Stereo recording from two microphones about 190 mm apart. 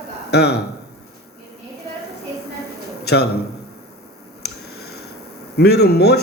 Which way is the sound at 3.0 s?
60° left (ahead or behind).